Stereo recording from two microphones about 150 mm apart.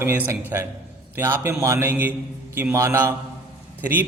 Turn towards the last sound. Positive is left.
turn(degrees=-10)  # may be behind; listen again after turning